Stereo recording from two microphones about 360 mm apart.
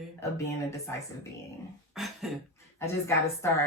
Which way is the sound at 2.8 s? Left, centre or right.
Centre.